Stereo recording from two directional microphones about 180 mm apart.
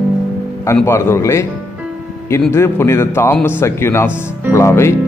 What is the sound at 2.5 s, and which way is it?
Speech, 15° left (ahead or behind).